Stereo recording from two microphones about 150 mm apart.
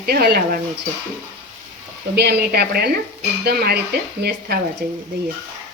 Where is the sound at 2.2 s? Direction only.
90° right.